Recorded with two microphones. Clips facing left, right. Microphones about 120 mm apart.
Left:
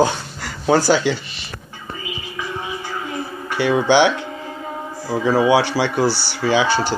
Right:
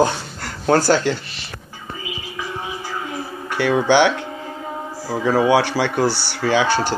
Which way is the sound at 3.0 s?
Centre (ahead or behind).